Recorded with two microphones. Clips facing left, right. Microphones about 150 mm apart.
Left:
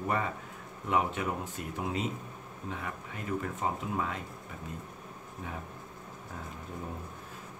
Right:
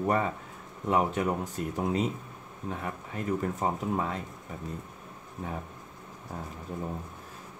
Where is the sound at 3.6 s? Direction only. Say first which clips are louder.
Right 3 dB; 35° right (ahead or behind).